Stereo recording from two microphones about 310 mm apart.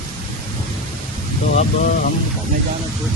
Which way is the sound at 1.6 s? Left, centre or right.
Left.